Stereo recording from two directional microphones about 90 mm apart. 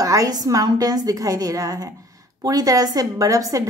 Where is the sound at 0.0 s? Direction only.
40° right (ahead or behind).